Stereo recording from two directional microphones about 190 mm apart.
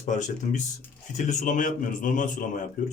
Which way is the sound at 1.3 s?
40° left (ahead or behind).